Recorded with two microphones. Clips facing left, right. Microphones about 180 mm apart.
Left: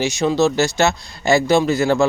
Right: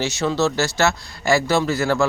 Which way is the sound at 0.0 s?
15° left (ahead or behind).